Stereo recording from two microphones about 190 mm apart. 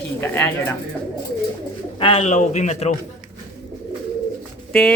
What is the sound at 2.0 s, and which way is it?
Speech, 30° left (ahead or behind).